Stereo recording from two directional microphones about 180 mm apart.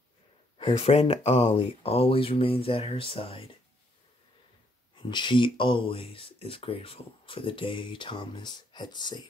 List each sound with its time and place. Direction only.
0.6 s speech: 30° left (ahead or behind)
4.9 s speech: 25° left (ahead or behind)